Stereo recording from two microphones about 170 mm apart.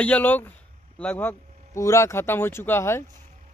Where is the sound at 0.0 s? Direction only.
10° left (ahead or behind).